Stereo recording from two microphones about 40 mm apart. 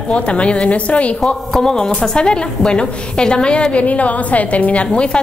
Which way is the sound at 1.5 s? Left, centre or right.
Centre.